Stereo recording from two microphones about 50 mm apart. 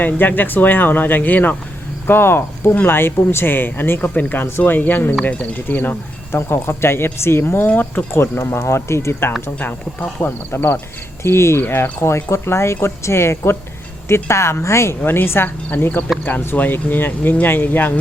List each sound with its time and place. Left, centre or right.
0.0 s speech: left
2.0 s speech: left
7.7 s speech: left
8.1 s speech: left
9.6 s speech: left
11.2 s speech: left
11.6 s speech: left
15.0 s speech: left
15.4 s speech: left